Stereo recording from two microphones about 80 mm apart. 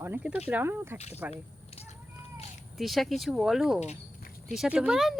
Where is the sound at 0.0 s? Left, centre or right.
Right.